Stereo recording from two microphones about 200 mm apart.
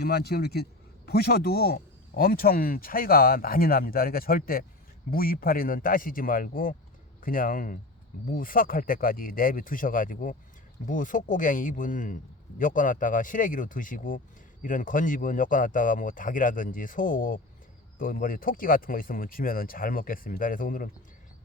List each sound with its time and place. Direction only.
0.0 s a man's voice: 50° left (ahead or behind)